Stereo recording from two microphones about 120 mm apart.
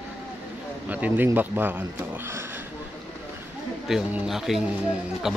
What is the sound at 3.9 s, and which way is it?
Speech, 5° right (ahead or behind).